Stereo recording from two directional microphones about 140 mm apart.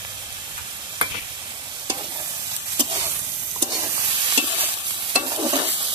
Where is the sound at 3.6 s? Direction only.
30° right (ahead or behind).